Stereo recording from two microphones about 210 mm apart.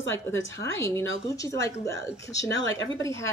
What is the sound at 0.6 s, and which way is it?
A woman's voice, 10° left (ahead or behind).